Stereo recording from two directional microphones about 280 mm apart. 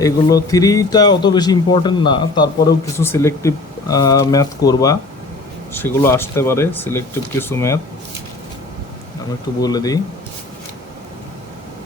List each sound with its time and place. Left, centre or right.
0.0 s a man's voice: centre
9.6 s a man's voice: centre